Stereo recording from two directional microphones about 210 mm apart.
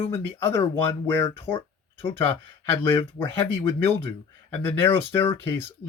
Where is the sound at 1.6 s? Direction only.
25° left (ahead or behind).